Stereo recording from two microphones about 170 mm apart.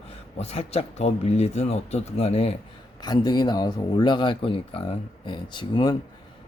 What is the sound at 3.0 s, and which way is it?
A man's voice, 25° left (ahead or behind).